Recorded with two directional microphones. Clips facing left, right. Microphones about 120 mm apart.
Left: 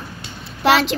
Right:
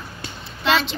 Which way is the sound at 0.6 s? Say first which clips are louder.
Left 5 dB; 75° left (ahead or behind).